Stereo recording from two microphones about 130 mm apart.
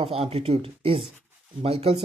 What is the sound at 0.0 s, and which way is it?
Speech, 50° right (ahead or behind).